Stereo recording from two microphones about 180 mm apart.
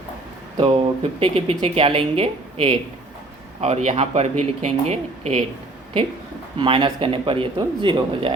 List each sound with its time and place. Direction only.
0.5 s speech: 30° right (ahead or behind)
6.6 s speech: 25° right (ahead or behind)